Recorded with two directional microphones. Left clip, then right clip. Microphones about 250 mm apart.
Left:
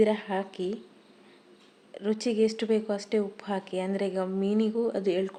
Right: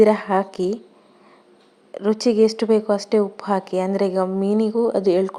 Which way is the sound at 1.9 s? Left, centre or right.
Centre.